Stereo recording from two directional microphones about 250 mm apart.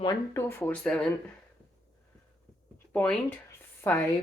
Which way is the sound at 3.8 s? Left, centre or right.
Centre.